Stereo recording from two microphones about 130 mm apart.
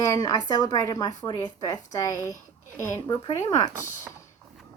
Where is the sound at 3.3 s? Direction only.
25° left (ahead or behind).